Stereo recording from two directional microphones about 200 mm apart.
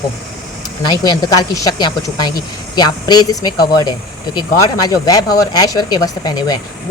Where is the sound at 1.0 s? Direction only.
20° left (ahead or behind).